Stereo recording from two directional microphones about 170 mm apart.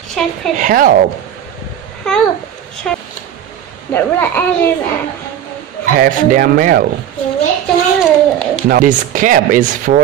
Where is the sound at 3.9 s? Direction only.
10° left (ahead or behind).